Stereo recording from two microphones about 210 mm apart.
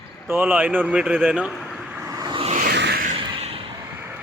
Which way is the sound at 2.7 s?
50° right (ahead or behind).